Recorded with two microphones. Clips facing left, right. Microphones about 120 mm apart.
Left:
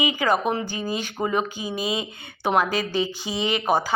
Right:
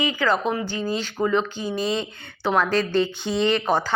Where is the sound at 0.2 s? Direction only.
15° left (ahead or behind).